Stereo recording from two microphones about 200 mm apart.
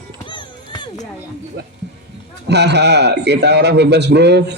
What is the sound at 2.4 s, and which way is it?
A man's voice, 55° right (ahead or behind).